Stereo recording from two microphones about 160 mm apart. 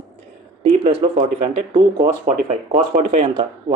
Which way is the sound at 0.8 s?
35° right (ahead or behind).